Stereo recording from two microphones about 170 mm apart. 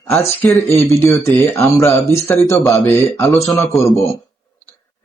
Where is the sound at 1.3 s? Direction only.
15° left (ahead or behind).